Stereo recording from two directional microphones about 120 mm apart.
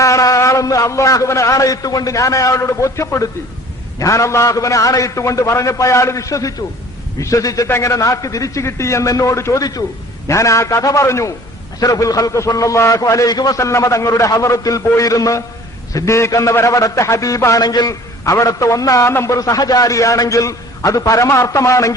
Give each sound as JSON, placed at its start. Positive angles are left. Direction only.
{"t": 0.0, "sound": "a man's voice", "side_deg": 30}